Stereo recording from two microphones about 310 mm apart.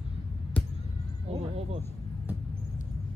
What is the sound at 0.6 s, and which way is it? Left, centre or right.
Basketball bounce, centre.